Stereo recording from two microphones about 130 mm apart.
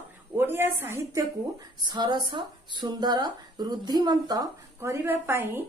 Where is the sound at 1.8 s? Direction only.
35° right (ahead or behind).